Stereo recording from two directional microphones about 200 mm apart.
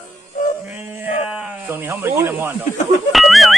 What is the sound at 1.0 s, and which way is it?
Sheep, 5° right (ahead or behind).